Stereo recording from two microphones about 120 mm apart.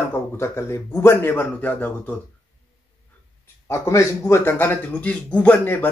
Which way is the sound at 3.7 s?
25° left (ahead or behind).